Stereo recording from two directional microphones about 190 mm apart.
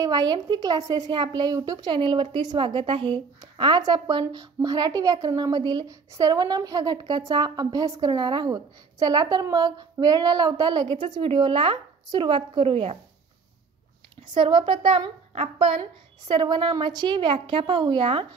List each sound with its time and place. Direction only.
0.0 s a woman's voice: 20° right (ahead or behind)
14.3 s a woman's voice: 25° right (ahead or behind)